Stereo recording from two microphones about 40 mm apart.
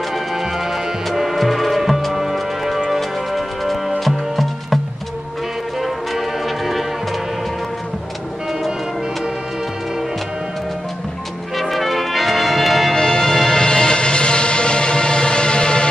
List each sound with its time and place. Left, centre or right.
0.7 s music: centre
5.8 s music: centre
11.7 s music: centre
12.9 s music: centre